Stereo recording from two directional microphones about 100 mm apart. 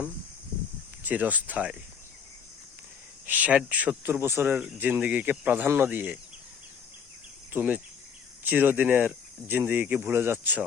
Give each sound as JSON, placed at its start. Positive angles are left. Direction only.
{"t": 1.0, "sound": "speech", "side_deg": -15}
{"t": 3.2, "sound": "speech", "side_deg": -15}
{"t": 7.5, "sound": "cricket", "side_deg": -15}
{"t": 8.4, "sound": "speech", "side_deg": -15}